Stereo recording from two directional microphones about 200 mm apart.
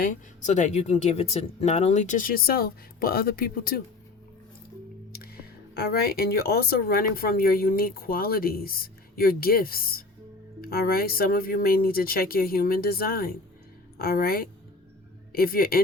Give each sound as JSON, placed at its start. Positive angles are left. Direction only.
{"t": 0.0, "sound": "speech", "side_deg": 40}
{"t": 5.1, "sound": "speech", "side_deg": 50}